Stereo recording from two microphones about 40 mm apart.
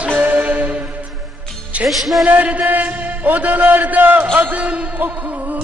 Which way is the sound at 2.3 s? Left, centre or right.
Right.